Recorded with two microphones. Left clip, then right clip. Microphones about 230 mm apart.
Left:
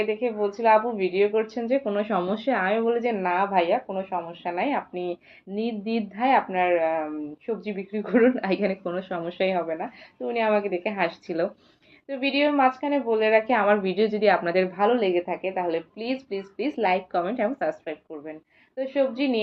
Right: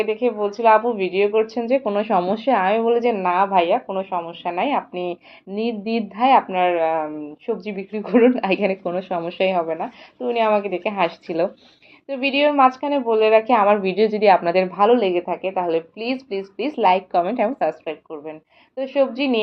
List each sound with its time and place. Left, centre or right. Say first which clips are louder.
0.0 s a woman's voice: right 5 dB; right